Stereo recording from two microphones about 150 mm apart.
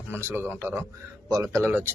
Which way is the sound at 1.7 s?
15° right (ahead or behind).